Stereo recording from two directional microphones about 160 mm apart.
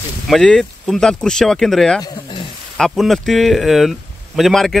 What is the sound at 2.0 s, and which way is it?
Snake, 30° left (ahead or behind).